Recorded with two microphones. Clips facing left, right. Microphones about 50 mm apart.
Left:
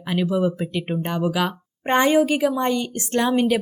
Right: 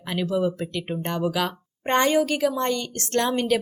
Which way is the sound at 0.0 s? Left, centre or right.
Centre.